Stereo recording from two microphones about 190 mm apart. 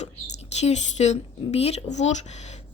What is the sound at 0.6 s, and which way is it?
Speech, 35° left (ahead or behind).